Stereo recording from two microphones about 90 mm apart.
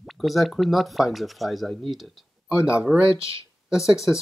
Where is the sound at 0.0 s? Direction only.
Centre (ahead or behind).